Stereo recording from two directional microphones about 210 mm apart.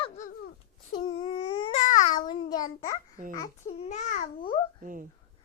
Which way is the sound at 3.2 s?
40° right (ahead or behind).